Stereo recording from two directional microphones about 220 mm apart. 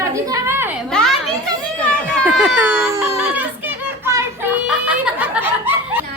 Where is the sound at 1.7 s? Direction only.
5° left (ahead or behind).